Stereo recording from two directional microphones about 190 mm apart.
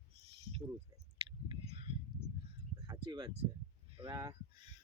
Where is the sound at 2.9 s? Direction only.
20° right (ahead or behind).